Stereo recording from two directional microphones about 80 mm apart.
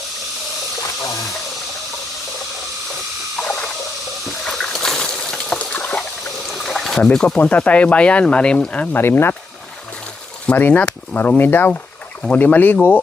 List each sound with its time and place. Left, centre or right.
0.8 s water: left
3.4 s rodents: centre
4.4 s a sound: centre
7.3 s speech: centre
8.9 s speech: left
10.4 s speech: centre